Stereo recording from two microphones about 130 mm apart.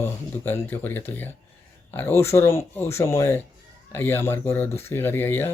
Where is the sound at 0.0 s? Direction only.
20° left (ahead or behind).